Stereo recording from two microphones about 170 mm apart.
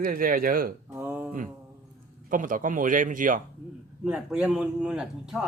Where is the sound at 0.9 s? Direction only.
15° right (ahead or behind).